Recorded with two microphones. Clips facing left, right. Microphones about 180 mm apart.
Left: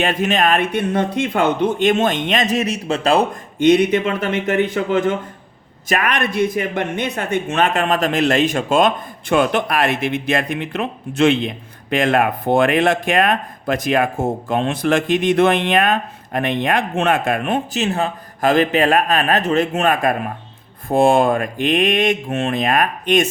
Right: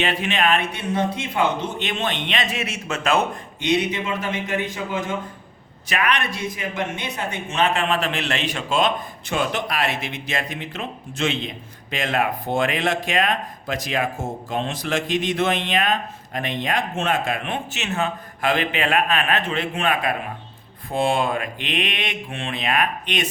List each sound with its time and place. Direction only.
0.0 s speech: 45° left (ahead or behind)
3.6 s a man's voice: 50° left (ahead or behind)
5.9 s speech: 45° left (ahead or behind)